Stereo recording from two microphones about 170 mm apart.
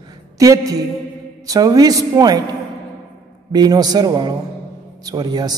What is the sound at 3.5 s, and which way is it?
A woman's voice, 25° right (ahead or behind).